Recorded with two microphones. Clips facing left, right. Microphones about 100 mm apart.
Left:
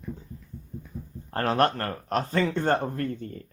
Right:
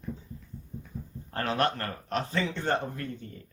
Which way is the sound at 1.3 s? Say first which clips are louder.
Left 5 dB; 40° left (ahead or behind).